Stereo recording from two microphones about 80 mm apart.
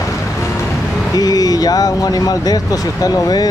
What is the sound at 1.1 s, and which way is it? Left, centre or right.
Speech, left.